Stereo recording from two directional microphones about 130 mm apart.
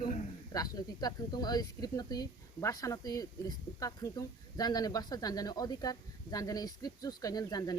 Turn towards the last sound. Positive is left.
turn(degrees=30)  # may be behind; listen again after turning